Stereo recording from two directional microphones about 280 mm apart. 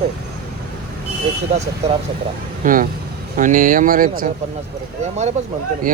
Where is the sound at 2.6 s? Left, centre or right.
Right.